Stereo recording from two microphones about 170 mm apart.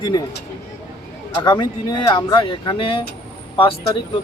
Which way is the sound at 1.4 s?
25° left (ahead or behind).